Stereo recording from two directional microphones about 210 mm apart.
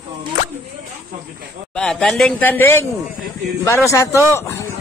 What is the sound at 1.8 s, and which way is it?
A man's voice, 5° left (ahead or behind).